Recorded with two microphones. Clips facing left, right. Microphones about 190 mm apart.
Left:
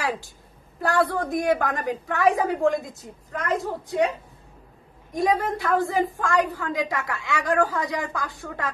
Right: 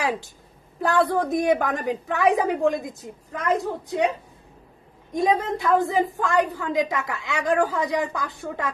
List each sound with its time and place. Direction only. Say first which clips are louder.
0.9 s a woman's voice: right 2 dB; 20° right (ahead or behind)
5.1 s a woman's voice: right 1 dB; 20° right (ahead or behind)